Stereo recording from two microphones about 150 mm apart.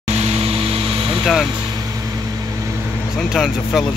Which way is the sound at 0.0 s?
45° right (ahead or behind).